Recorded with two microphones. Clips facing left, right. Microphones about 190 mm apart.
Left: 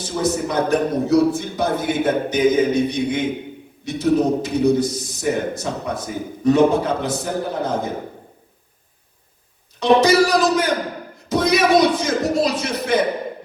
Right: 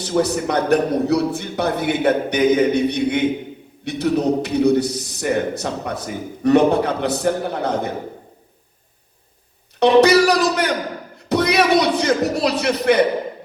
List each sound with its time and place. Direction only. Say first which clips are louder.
0.0 s a man's voice: right 2 dB; 65° right (ahead or behind)
9.8 s a man's voice: right 2 dB; 65° right (ahead or behind)
11.3 s a sound: even; 65° right (ahead or behind)